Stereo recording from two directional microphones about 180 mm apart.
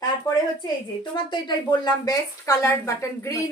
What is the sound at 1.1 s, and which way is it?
A woman's voice, 25° left (ahead or behind).